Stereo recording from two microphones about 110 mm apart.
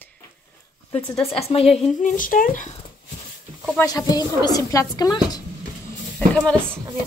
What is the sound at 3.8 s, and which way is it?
A woman's voice, 35° left (ahead or behind).